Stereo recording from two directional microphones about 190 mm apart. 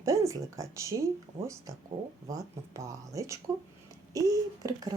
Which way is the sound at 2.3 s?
15° right (ahead or behind).